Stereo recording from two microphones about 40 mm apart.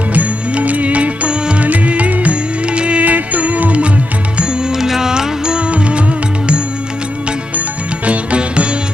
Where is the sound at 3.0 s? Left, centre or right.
Right.